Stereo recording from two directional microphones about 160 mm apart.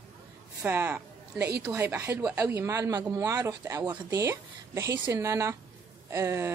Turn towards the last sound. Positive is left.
turn(degrees=-15)  # may be behind; listen again after turning